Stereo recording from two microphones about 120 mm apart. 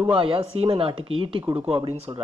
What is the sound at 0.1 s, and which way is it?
Speech, 50° right (ahead or behind).